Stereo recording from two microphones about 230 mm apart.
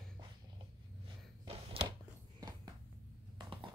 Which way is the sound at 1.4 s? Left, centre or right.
Right.